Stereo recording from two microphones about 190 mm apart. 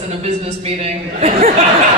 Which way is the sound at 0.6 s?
35° right (ahead or behind).